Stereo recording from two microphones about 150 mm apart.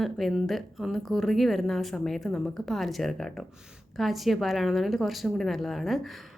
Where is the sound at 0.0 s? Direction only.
Centre (ahead or behind).